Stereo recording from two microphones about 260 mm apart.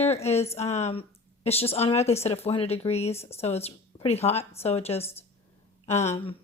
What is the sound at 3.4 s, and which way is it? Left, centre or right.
Speech, left.